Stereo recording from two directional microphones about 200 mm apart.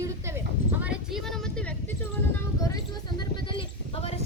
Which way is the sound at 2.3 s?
15° left (ahead or behind).